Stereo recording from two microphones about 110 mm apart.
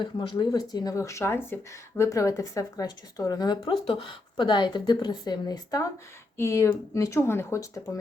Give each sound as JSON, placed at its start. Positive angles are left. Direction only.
{"t": 0.0, "sound": "speech", "side_deg": 45}
{"t": 3.8, "sound": "a woman's voice", "side_deg": 50}
{"t": 6.3, "sound": "speech", "side_deg": 25}